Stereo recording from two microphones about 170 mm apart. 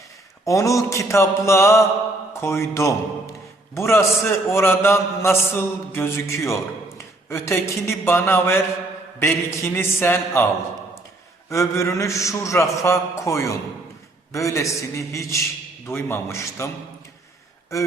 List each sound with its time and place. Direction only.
0.4 s a man's voice: 20° left (ahead or behind)
11.4 s a man's voice: 15° left (ahead or behind)